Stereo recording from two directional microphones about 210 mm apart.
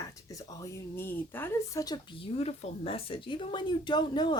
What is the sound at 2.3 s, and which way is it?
A woman's voice, 30° left (ahead or behind).